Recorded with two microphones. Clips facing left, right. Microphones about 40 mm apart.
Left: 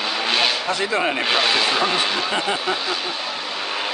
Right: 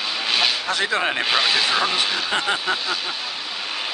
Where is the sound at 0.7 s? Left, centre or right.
Right.